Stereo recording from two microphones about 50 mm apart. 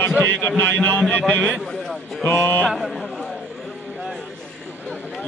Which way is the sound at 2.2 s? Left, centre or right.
Left.